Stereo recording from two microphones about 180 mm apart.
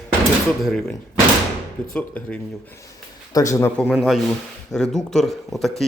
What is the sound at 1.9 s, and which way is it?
Cutlery, 10° left (ahead or behind).